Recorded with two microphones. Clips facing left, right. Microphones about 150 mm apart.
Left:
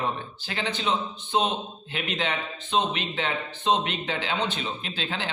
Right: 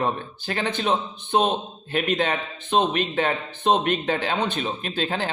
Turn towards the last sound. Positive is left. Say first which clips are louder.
# right 6 dB
turn(degrees=-45)  # may be behind; listen again after turning